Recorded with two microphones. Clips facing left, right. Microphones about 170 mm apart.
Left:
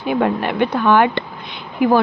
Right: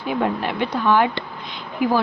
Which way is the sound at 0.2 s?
60° left (ahead or behind).